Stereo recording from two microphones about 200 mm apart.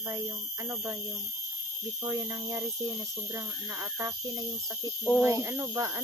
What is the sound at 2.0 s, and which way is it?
Speech, 15° right (ahead or behind).